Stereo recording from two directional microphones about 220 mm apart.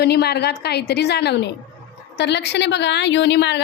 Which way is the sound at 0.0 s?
50° left (ahead or behind).